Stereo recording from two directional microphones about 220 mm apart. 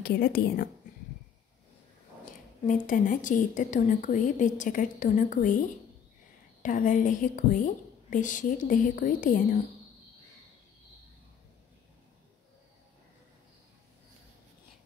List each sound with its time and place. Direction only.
0.0 s a woman's voice: 45° left (ahead or behind)
2.6 s a woman's voice: 35° left (ahead or behind)